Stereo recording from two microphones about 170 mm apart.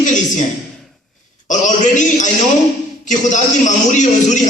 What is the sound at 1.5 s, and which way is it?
A man's voice, 45° left (ahead or behind).